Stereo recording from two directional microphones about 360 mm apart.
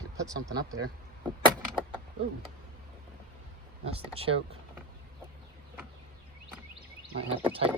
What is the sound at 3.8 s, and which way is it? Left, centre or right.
Speech, centre.